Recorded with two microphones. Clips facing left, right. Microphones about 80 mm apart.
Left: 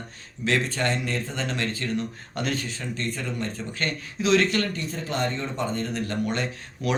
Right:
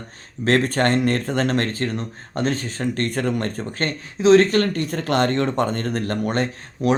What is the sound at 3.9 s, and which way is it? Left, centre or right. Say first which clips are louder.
Speech: right 9 dB; right.